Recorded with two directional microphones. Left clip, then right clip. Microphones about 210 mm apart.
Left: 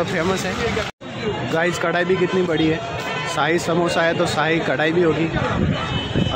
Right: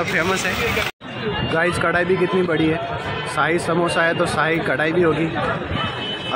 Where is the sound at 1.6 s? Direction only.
5° left (ahead or behind).